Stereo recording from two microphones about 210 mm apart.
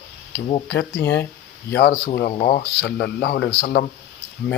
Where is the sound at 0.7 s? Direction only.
55° left (ahead or behind).